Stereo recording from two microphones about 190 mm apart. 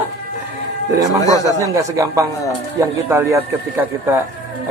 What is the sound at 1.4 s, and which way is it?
Speech, 15° right (ahead or behind).